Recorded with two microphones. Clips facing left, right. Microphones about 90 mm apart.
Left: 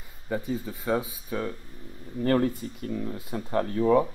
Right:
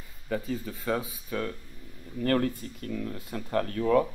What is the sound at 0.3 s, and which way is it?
Speech, 20° left (ahead or behind).